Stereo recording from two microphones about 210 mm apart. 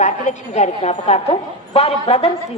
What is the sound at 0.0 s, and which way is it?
A woman's voice, 35° left (ahead or behind).